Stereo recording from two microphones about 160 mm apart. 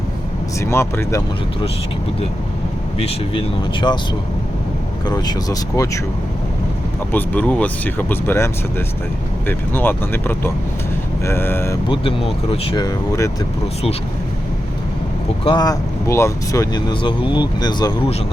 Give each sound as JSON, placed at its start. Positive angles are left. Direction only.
{"t": 0.6, "sound": "speech", "side_deg": 15}
{"t": 3.0, "sound": "speech", "side_deg": 35}
{"t": 5.0, "sound": "speech", "side_deg": 25}
{"t": 7.1, "sound": "speech", "side_deg": 10}
{"t": 9.5, "sound": "speech", "side_deg": 15}
{"t": 11.9, "sound": "speech", "side_deg": 35}
{"t": 12.7, "sound": "speech", "side_deg": 25}
{"t": 15.4, "sound": "speech", "side_deg": 25}